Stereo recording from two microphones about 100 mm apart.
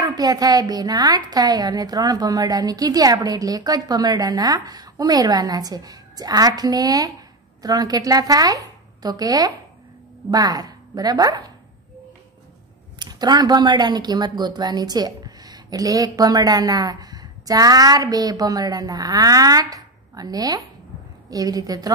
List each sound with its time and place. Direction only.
0.0 s a woman's voice: 40° right (ahead or behind)
13.0 s a woman's voice: 45° right (ahead or behind)